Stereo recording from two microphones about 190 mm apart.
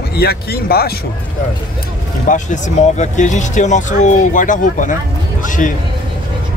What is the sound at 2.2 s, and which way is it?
Speech, 40° left (ahead or behind).